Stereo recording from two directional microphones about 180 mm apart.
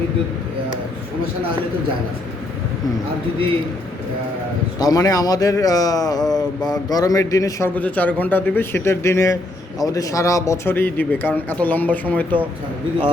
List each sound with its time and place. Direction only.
4.8 s a man's voice: 20° left (ahead or behind)